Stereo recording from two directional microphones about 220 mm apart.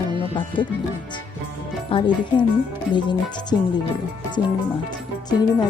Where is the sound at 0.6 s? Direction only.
20° left (ahead or behind).